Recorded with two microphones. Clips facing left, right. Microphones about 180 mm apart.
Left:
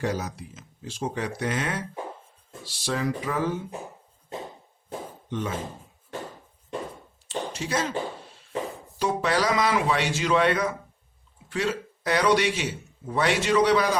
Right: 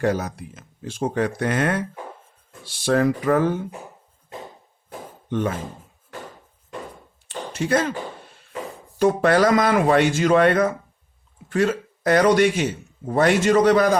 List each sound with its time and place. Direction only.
0.0 s speech: 55° right (ahead or behind)
5.3 s speech: 55° right (ahead or behind)
7.3 s a sound: 55° right (ahead or behind)
9.0 s speech: 55° right (ahead or behind)